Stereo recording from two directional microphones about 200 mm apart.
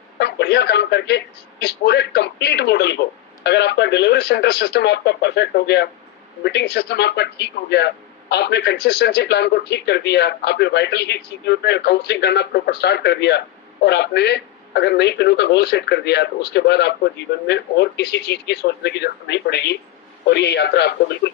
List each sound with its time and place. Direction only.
0.2 s a man's voice: 55° left (ahead or behind)